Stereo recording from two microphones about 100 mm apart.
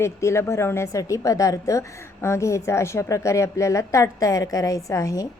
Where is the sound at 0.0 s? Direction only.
30° left (ahead or behind).